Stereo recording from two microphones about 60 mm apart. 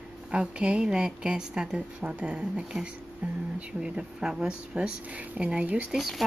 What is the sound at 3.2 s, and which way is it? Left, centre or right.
A woman's voice, right.